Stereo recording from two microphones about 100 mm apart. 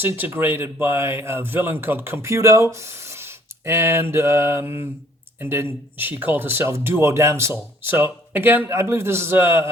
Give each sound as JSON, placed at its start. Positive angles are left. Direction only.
{"t": 0.0, "sound": "speech", "side_deg": -20}